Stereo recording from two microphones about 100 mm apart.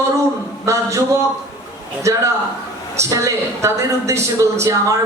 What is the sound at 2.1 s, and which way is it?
A man's voice, 30° right (ahead or behind).